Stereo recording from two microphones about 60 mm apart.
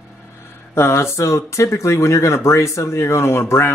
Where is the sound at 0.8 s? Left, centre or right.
Left.